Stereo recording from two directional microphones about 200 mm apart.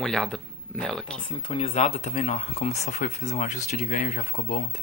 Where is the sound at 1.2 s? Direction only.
25° left (ahead or behind).